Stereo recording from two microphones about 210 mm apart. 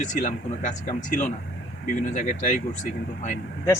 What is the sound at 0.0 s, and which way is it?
Speech, 35° left (ahead or behind).